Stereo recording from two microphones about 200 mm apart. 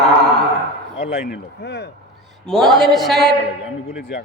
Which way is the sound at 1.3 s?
55° left (ahead or behind).